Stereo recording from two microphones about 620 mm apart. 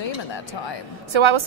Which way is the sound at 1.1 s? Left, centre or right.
Right.